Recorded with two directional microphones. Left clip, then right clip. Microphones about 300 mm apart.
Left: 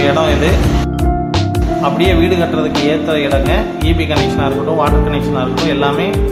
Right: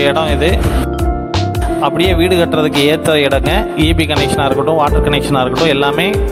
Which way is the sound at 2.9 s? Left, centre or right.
Right.